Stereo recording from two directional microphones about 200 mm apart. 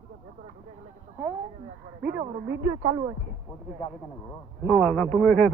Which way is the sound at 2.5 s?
20° right (ahead or behind).